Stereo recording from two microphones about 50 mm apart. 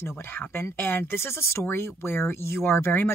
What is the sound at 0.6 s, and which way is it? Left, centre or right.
Speech, left.